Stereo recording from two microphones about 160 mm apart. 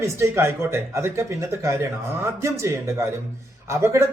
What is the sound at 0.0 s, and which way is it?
A man's voice, 15° right (ahead or behind).